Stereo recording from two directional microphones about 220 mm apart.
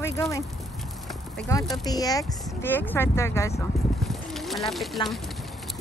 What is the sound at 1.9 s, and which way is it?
Speech, 15° left (ahead or behind).